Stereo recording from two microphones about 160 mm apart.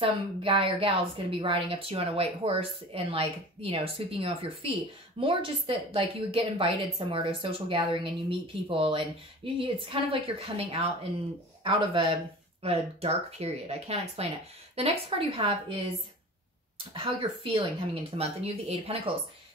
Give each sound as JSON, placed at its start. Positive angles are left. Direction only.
{"t": 0.0, "sound": "a woman's voice", "side_deg": -35}
{"t": 16.9, "sound": "a woman's voice", "side_deg": -35}